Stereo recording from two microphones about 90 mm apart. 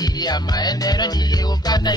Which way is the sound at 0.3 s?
50° left (ahead or behind).